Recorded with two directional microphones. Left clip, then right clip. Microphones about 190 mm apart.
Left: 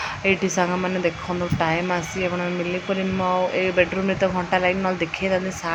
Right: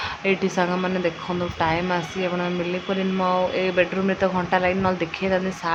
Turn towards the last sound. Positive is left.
turn(degrees=5)  # may be behind; listen again after turning